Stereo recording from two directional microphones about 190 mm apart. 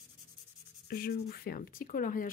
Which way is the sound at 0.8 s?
50° left (ahead or behind).